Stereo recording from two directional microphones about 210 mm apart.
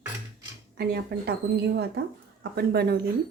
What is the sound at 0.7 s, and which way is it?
Speech, 50° right (ahead or behind).